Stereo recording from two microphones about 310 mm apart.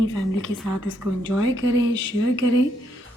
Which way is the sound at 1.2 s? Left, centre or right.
Left.